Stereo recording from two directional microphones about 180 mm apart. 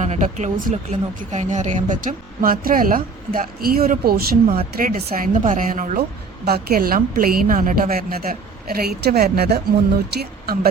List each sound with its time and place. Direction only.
0.0 s a woman's voice: 40° right (ahead or behind); by 10.7 s 60° right (ahead or behind)